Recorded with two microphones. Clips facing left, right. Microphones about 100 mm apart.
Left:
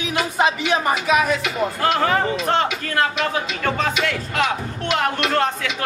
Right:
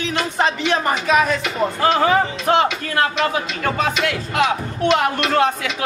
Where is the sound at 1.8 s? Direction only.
5° right (ahead or behind).